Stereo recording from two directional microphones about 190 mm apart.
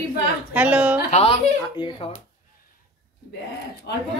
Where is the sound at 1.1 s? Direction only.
30° left (ahead or behind).